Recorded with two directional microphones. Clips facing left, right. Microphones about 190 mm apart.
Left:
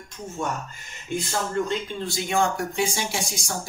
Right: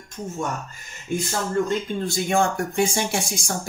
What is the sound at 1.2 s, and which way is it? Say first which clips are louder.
Speech: right 2 dB; 45° right (ahead or behind).